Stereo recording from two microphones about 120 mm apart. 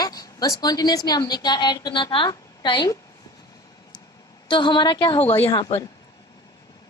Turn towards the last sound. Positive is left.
turn(degrees=40)  # may be behind; listen again after turning